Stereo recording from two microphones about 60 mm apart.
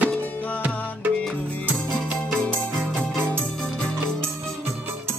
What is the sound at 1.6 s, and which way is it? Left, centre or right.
Music, right.